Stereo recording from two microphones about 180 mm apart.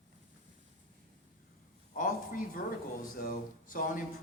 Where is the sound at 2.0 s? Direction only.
50° left (ahead or behind).